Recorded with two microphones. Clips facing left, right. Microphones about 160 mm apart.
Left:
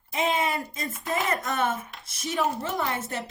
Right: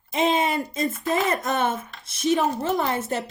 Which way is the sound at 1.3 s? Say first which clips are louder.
Right 3 dB; 25° right (ahead or behind).